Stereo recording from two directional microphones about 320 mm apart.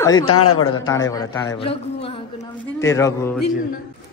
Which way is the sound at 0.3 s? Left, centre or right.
Left.